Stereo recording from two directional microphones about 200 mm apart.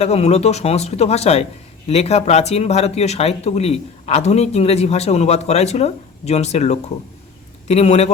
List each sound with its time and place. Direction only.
0.0 s speech: 30° left (ahead or behind)